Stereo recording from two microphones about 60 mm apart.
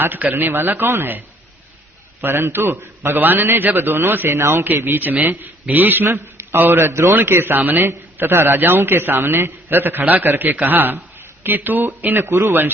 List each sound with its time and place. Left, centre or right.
0.0 s a man's voice: right
2.2 s a man's voice: right
4.3 s a man's voice: right
4.6 s a man's voice: right
6.1 s a man's voice: right